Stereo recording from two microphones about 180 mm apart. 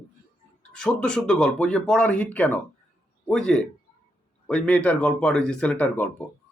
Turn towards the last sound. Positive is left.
turn(degrees=10)  # may be behind; listen again after turning